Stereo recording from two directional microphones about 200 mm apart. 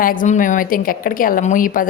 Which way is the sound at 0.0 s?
45° left (ahead or behind).